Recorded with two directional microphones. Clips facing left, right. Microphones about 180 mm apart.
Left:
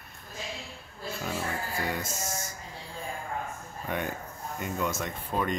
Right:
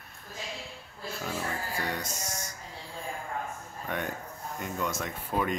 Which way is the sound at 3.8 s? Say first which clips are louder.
Left 1 dB; 5° left (ahead or behind).